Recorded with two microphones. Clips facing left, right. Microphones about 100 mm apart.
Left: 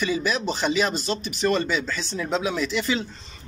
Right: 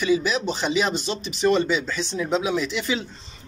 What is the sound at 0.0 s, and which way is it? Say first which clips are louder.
Speech: right 3 dB; 10° right (ahead or behind).